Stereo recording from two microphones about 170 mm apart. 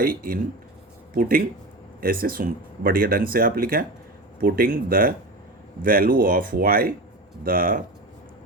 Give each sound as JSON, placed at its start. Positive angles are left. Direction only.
{"t": 0.0, "sound": "speech", "side_deg": -55}